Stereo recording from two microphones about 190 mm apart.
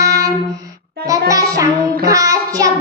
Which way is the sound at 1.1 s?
15° right (ahead or behind).